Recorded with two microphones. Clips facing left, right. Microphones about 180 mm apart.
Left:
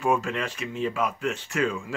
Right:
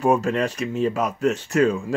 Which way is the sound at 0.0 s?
40° right (ahead or behind).